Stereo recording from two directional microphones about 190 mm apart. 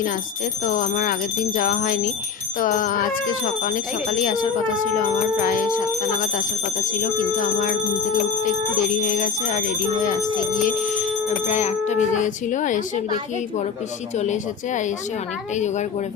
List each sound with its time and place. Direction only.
0.6 s speech: 45° left (ahead or behind)
4.9 s speech: 45° left (ahead or behind)
7.0 s speech: 45° left (ahead or behind)
11.4 s bicycle bell: 40° left (ahead or behind)
14.2 s bicycle bell: 40° left (ahead or behind)